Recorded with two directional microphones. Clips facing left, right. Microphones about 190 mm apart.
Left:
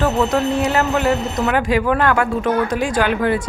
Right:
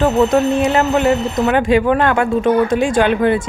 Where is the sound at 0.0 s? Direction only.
25° right (ahead or behind).